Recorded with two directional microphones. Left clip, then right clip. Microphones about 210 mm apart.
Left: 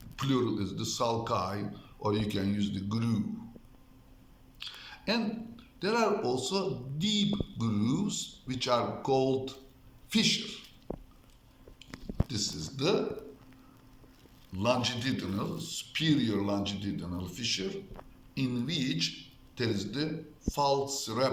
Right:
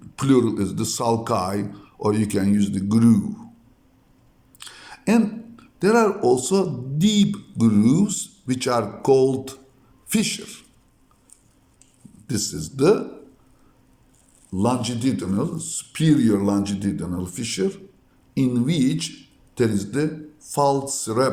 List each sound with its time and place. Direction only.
0.2 s a man's voice: 65° right (ahead or behind)
4.6 s a man's voice: 65° right (ahead or behind)
12.3 s a man's voice: 65° right (ahead or behind)
14.5 s a man's voice: 65° right (ahead or behind)